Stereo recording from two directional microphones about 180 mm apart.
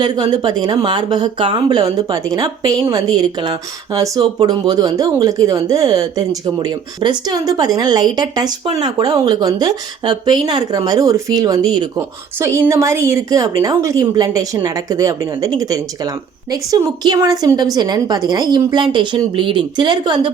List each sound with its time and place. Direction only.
0.0 s a woman's voice: 25° right (ahead or behind)